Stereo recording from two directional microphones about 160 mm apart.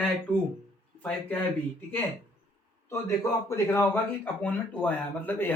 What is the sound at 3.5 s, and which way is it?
A man's voice, 15° left (ahead or behind).